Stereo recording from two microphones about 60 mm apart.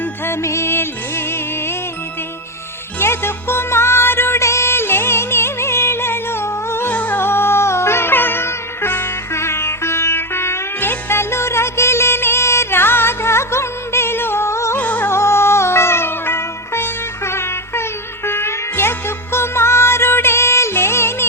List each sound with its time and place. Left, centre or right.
0.4 s music: left
3.0 s music: left
6.9 s music: left
14.8 s music: left
15.0 s music: left